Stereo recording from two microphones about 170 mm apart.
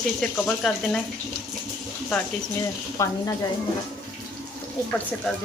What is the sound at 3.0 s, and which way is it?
Speech, 20° left (ahead or behind).